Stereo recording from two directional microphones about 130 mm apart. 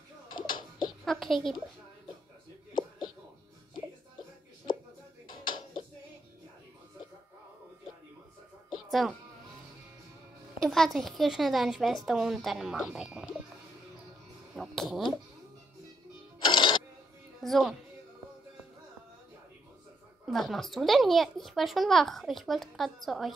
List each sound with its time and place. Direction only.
0.3 s a sound: 40° left (ahead or behind)
1.0 s a woman's voice: centre (ahead or behind)
5.4 s a sound: 40° left (ahead or behind)
8.6 s music: centre (ahead or behind)
10.6 s a child's voice: centre (ahead or behind)
14.5 s a sound: centre (ahead or behind)
16.4 s music: 40° left (ahead or behind)
17.4 s speech: centre (ahead or behind)
20.2 s a child's voice: centre (ahead or behind)